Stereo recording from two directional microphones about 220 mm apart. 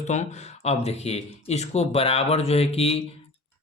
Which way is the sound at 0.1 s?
30° left (ahead or behind).